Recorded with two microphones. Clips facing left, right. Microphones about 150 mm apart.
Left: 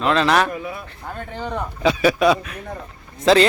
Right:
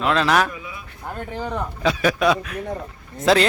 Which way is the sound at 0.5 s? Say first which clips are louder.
Left 7 dB; 50° left (ahead or behind).